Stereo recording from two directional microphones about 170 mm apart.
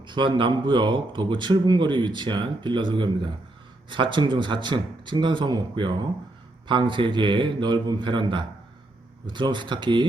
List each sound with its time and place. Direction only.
0.0 s speech: 25° right (ahead or behind)